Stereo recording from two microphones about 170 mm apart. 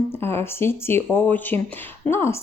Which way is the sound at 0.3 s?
15° left (ahead or behind).